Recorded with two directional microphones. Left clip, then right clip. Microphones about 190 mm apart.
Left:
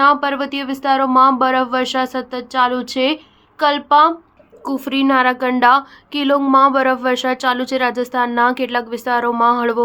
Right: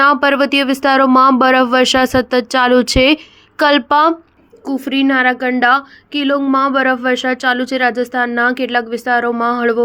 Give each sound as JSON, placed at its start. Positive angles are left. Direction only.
{"t": 0.0, "sound": "speech", "side_deg": -40}
{"t": 4.6, "sound": "a woman's voice", "side_deg": -5}